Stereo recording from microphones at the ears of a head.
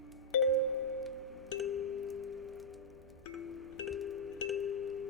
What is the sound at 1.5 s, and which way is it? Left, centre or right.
Music, left.